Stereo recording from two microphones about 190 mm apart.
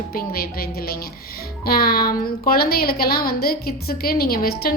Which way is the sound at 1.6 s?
55° left (ahead or behind).